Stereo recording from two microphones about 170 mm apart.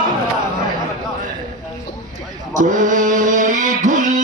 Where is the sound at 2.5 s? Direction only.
50° right (ahead or behind).